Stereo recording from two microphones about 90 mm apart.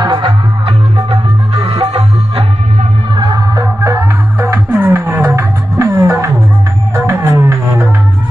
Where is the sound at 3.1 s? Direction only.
45° right (ahead or behind); by 5.4 s 20° right (ahead or behind).